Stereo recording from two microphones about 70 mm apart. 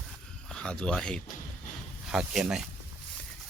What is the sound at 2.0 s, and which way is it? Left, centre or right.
Speech, centre.